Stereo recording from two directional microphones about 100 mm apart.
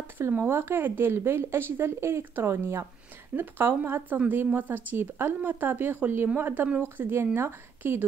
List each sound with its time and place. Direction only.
0.3 s speech: 25° right (ahead or behind)